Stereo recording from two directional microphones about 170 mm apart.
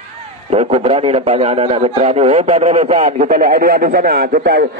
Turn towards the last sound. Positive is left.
turn(degrees=-65)  # may be behind; listen again after turning